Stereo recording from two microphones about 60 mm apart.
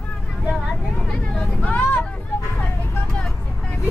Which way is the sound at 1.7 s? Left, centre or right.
Left.